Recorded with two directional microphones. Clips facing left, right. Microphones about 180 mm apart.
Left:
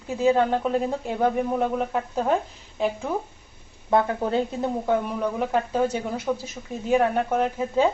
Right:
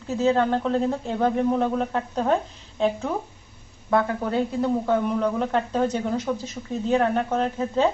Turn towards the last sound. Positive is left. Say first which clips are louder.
# left 1 dB
turn(degrees=10)  # may be behind; listen again after turning